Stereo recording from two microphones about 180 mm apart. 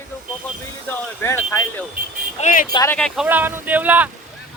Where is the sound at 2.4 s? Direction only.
45° left (ahead or behind).